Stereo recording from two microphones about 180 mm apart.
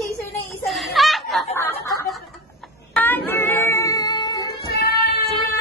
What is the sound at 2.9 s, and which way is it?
Child singing, 10° left (ahead or behind).